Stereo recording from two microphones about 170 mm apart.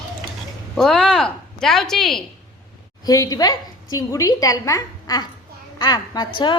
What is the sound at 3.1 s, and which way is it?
A woman's voice, 20° left (ahead or behind).